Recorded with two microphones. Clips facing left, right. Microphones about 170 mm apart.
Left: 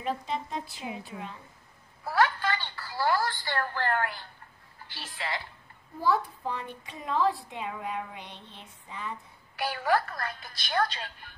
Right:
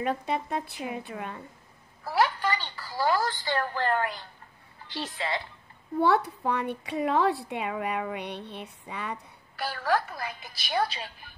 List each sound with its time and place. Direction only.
0.0 s a woman's voice: 60° right (ahead or behind)
2.1 s a woman's voice: 15° right (ahead or behind)
5.9 s speech: 75° right (ahead or behind)
9.6 s a woman's voice: 15° left (ahead or behind)
10.0 s a woman's voice: 5° right (ahead or behind)